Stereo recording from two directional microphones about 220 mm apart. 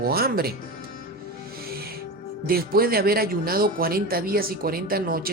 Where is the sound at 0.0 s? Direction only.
45° right (ahead or behind).